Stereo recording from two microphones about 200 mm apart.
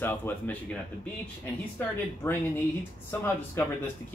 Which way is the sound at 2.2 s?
10° left (ahead or behind).